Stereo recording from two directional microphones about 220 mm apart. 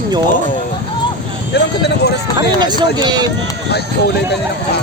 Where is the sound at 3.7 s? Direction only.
50° left (ahead or behind).